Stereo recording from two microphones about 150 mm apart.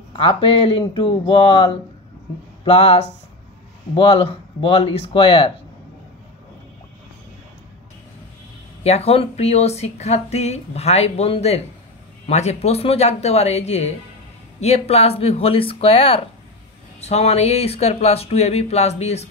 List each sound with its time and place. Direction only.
0.1 s speech: 40° left (ahead or behind)
8.8 s speech: 45° left (ahead or behind)